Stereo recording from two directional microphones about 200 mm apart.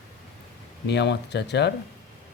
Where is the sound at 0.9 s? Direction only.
60° left (ahead or behind).